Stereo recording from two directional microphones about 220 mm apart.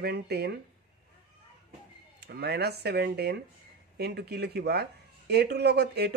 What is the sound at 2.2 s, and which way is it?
Speech, 50° right (ahead or behind).